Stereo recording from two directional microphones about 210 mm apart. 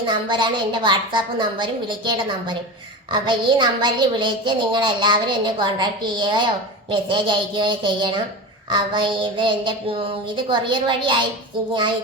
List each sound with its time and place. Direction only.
0.0 s a woman's voice: 20° right (ahead or behind)